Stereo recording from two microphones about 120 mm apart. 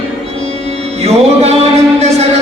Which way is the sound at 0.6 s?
60° right (ahead or behind).